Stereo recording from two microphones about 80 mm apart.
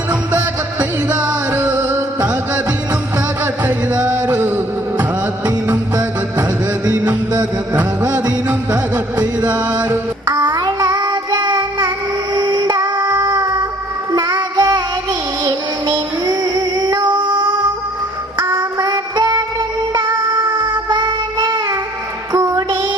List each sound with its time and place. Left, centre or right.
0.3 s music: right
3.4 s music: right
7.7 s music: centre
9.2 s music: right
10.2 s child singing: right
18.3 s music: right
18.8 s music: right
20.9 s child singing: right
22.3 s music: right